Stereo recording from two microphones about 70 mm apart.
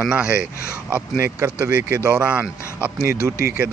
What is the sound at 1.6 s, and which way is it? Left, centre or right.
A man's voice, right.